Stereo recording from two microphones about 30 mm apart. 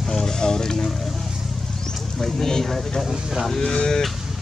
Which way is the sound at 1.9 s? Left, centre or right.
Centre.